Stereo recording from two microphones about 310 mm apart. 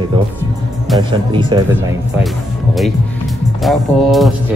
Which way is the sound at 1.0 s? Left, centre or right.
Centre.